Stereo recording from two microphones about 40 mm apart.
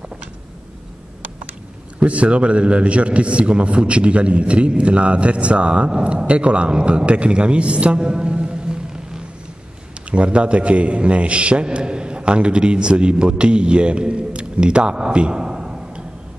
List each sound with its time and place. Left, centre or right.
2.0 s a man's voice: right